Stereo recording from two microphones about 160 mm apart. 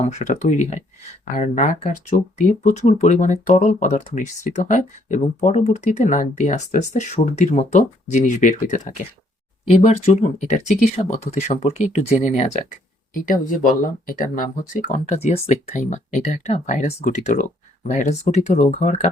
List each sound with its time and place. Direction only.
0.0 s speech: 45° left (ahead or behind)
9.8 s speech: 45° left (ahead or behind)
13.1 s speech: 60° left (ahead or behind)